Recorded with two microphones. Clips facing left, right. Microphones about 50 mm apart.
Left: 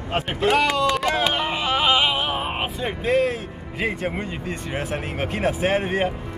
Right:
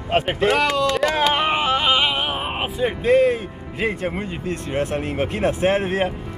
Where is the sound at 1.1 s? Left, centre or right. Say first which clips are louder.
Right 4 dB; right.